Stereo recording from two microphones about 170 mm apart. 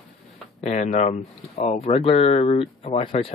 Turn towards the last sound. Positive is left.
turn(degrees=35)  # may be behind; listen again after turning